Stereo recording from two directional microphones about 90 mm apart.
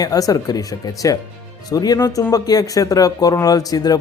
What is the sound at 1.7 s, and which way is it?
Speech, 45° left (ahead or behind).